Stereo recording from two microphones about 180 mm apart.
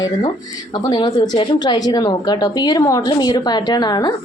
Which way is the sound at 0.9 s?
25° left (ahead or behind).